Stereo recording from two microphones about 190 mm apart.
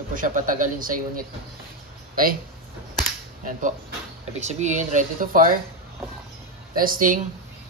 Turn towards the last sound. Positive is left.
turn(degrees=-45)  # may be behind; listen again after turning